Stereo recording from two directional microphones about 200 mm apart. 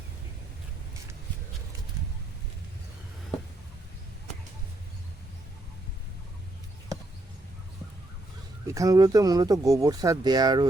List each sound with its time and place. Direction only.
8.6 s speech: 15° right (ahead or behind)